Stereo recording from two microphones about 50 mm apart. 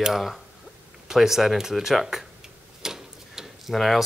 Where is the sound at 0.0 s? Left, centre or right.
Centre.